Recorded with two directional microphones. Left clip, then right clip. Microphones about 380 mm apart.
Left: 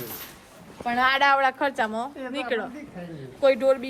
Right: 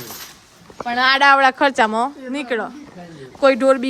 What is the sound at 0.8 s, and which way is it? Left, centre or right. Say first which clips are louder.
Speech: right 4 dB; centre.